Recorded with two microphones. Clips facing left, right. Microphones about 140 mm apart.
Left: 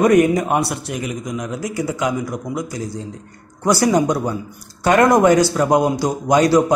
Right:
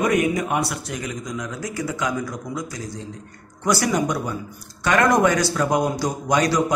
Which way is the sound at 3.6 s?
35° left (ahead or behind).